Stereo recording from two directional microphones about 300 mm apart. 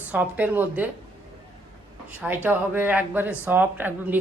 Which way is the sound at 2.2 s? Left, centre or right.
Centre.